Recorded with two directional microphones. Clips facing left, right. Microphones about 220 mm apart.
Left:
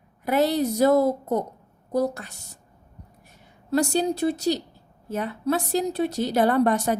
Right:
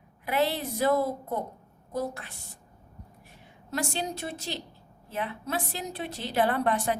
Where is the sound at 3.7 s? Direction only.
40° left (ahead or behind).